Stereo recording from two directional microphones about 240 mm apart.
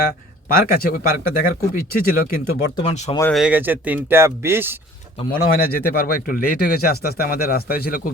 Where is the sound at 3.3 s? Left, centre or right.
Centre.